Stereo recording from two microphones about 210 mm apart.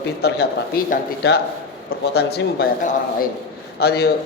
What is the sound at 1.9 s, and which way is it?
Speech, 50° left (ahead or behind).